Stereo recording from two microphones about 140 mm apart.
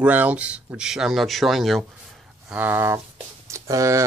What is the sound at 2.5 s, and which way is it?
Speech, 15° right (ahead or behind).